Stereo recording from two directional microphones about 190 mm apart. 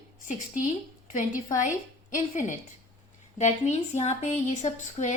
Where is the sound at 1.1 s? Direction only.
45° left (ahead or behind).